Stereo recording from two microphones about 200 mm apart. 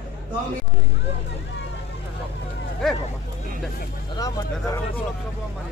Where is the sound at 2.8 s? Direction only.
Centre (ahead or behind).